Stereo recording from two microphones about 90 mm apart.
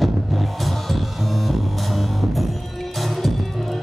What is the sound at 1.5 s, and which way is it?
Music, centre (ahead or behind).